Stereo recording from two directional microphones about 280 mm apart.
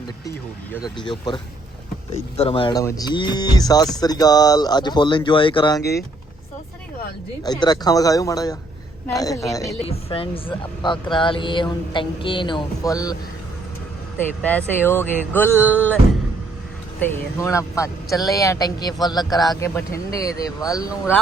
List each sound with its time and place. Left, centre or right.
0.3 s speech: centre
5.8 s speech: left
7.4 s speech: centre
14.4 s speech: centre
17.0 s speech: centre